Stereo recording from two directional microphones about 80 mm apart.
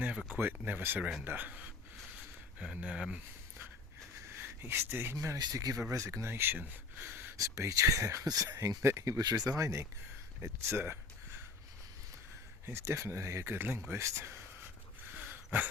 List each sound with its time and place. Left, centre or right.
0.0 s a sound: centre
0.3 s speech: right
4.3 s speech: right
5.4 s speech: right
7.3 s speech: right
9.2 s speech: right
12.6 s speech: right
15.1 s a sound: right